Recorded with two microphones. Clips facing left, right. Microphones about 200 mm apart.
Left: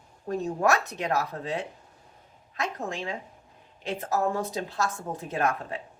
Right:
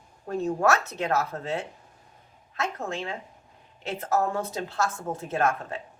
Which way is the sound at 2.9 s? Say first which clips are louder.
Right 1 dB; 15° left (ahead or behind).